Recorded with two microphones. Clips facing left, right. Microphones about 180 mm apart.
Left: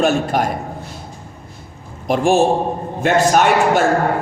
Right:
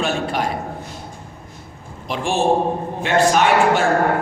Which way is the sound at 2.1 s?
45° left (ahead or behind).